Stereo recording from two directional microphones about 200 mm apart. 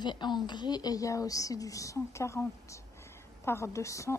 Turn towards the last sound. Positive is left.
turn(degrees=15)  # may be behind; listen again after turning